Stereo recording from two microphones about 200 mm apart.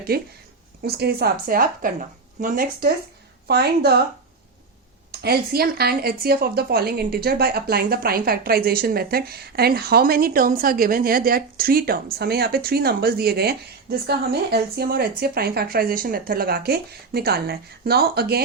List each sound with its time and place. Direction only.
0.1 s a woman's voice: 50° right (ahead or behind)
5.1 s a woman's voice: 50° right (ahead or behind)